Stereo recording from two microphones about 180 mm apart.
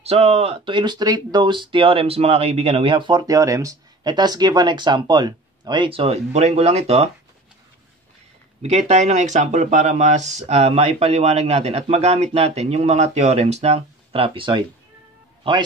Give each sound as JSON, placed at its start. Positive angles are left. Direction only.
{"t": 0.0, "sound": "speech", "side_deg": -35}
{"t": 8.6, "sound": "speech", "side_deg": -40}